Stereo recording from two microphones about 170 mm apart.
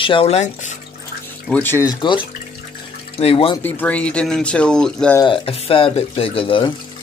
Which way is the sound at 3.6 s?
10° left (ahead or behind).